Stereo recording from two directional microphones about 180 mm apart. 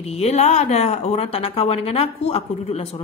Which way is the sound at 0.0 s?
35° left (ahead or behind).